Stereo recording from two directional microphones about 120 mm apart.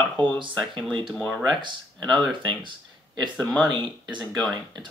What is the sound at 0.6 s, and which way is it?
Speech, 5° left (ahead or behind).